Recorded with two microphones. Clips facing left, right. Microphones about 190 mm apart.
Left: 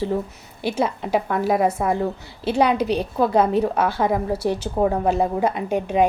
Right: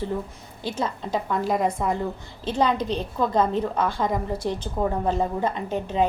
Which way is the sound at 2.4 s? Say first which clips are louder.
Left 4 dB; 10° left (ahead or behind).